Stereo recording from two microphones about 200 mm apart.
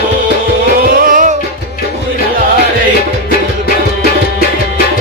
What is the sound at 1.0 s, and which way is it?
Music, 40° right (ahead or behind).